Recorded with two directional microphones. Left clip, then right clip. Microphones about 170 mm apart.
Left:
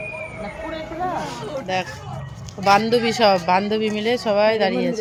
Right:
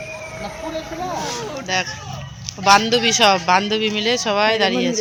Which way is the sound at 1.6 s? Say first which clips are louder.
Right 4 dB; 5° left (ahead or behind).